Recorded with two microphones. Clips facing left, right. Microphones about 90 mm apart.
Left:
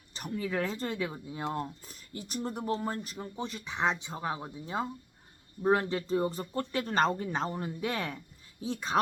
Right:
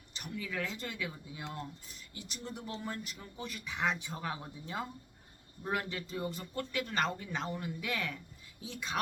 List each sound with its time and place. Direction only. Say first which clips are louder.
0.1 s speech: left 7 dB; 40° left (ahead or behind)